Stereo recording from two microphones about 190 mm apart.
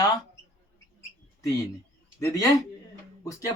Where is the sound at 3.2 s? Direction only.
20° left (ahead or behind).